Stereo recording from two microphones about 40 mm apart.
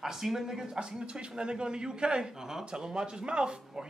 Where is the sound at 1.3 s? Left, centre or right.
Right.